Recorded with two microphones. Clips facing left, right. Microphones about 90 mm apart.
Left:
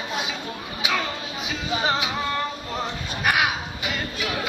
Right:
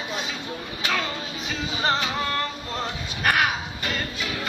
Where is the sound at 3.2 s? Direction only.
5° left (ahead or behind).